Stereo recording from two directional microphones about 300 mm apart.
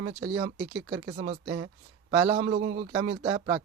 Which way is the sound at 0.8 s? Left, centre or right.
Centre.